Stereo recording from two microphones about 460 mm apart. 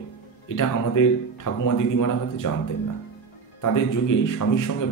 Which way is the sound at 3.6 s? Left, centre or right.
Left.